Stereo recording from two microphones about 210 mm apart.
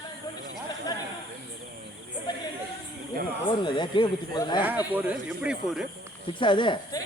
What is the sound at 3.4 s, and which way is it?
Speech, 20° left (ahead or behind).